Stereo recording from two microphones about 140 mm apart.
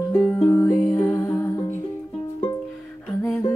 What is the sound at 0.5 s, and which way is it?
Music, 20° left (ahead or behind).